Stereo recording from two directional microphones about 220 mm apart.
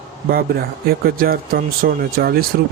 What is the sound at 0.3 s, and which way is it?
Speech, 45° right (ahead or behind).